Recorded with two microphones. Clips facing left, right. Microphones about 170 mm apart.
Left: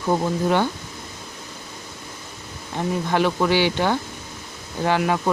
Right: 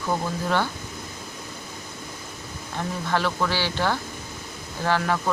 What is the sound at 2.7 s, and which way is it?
Speech, 20° left (ahead or behind).